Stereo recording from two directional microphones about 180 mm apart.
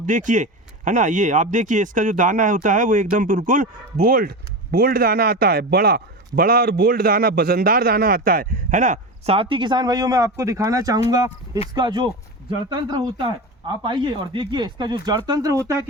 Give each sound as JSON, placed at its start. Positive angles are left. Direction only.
{"t": 0.0, "sound": "speech", "side_deg": -45}